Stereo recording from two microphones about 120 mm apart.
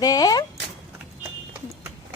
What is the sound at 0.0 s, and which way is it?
Speech, 30° left (ahead or behind).